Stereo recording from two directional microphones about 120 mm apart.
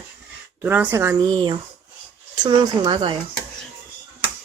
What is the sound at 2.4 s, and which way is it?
Speech, 35° right (ahead or behind).